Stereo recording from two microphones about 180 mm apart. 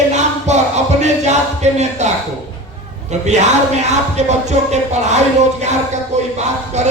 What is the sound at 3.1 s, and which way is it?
Music, 40° right (ahead or behind).